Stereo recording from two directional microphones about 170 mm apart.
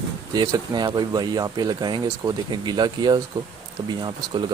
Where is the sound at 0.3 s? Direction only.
25° right (ahead or behind).